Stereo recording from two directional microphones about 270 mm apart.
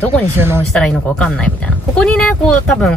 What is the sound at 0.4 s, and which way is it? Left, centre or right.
Speech, centre.